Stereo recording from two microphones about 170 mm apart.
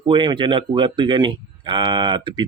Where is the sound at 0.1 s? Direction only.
30° right (ahead or behind).